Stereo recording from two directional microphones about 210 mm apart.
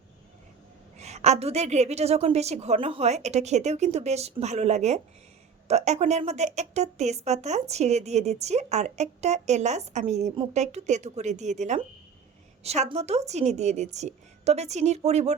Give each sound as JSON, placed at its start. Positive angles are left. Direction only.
{"t": 0.9, "sound": "a woman's voice", "side_deg": -30}